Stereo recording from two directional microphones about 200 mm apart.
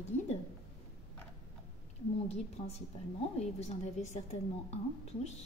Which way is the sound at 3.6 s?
35° left (ahead or behind).